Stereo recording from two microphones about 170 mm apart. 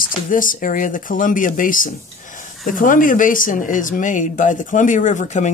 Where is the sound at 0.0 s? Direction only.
50° left (ahead or behind).